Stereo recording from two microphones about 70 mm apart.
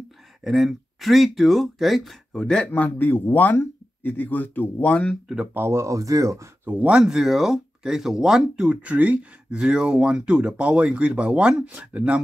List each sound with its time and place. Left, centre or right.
0.4 s speech: centre
2.3 s speech: centre
2.7 s speech: left
5.5 s speech: right
6.6 s speech: right
6.9 s speech: centre